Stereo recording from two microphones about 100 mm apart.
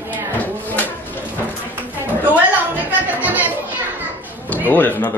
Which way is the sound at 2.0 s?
20° right (ahead or behind).